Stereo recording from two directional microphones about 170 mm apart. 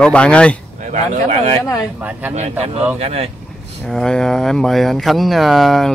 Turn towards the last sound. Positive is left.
turn(degrees=0)  # may be behind; listen again after turning